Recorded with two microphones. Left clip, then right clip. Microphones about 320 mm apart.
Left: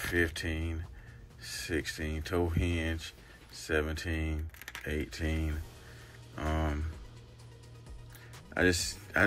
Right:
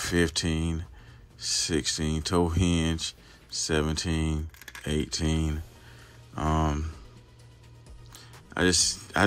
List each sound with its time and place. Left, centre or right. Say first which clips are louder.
0.0 s speech: right 4 dB; centre
8.1 s music: right 3 dB; centre